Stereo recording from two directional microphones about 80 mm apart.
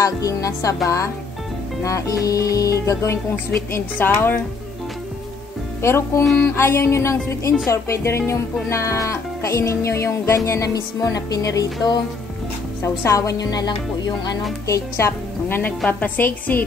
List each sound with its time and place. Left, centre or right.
0.0 s a woman's voice: left
5.8 s music: left
10.7 s speech: left
14.7 s music: left
15.9 s a woman's voice: left